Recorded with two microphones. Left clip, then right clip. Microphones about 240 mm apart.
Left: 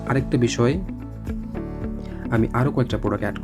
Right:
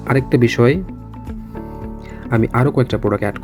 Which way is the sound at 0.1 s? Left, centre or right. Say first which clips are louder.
Right 7 dB; centre.